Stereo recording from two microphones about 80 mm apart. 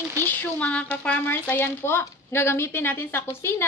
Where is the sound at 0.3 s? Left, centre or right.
Centre.